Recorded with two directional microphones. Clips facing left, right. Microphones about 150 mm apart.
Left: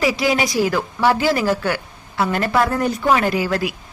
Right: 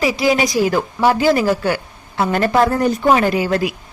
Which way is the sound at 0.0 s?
15° right (ahead or behind).